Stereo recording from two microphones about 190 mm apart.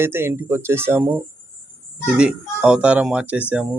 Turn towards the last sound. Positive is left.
turn(degrees=-5)  # may be behind; listen again after turning